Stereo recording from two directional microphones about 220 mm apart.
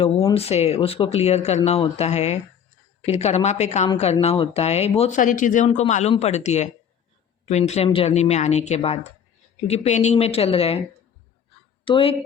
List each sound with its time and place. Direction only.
0.3 s speech: 30° left (ahead or behind)
11.9 s speech: 25° left (ahead or behind)